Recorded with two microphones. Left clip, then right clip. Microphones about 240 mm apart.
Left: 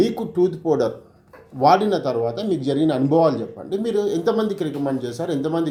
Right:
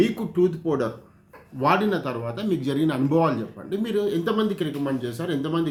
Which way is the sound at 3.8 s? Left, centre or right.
Right.